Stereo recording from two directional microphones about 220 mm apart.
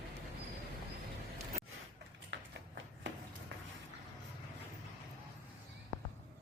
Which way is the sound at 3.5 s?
55° right (ahead or behind).